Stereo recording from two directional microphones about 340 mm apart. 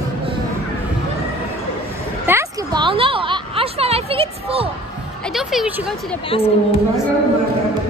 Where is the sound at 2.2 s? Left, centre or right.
Centre.